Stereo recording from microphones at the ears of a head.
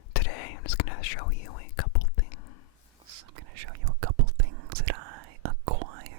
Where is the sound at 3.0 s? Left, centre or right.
Right.